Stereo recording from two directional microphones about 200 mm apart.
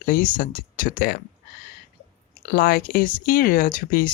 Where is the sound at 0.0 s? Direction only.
45° left (ahead or behind).